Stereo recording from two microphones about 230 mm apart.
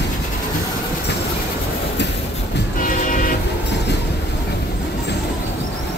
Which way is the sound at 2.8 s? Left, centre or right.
Left.